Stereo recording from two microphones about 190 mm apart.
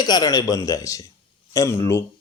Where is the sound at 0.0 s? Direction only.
20° left (ahead or behind).